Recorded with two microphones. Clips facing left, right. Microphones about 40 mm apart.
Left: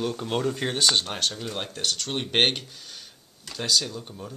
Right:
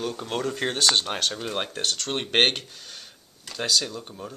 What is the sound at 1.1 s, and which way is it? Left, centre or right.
Speech, centre.